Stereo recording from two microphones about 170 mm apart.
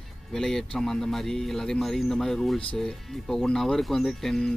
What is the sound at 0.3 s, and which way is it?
A man's voice, centre (ahead or behind).